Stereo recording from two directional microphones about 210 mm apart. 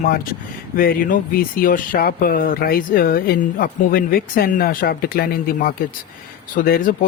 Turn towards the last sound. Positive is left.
turn(degrees=45)  # may be behind; listen again after turning